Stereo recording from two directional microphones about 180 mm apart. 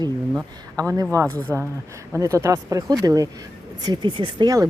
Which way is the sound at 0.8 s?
20° right (ahead or behind).